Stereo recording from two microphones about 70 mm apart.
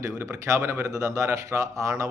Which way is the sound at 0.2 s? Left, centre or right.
Right.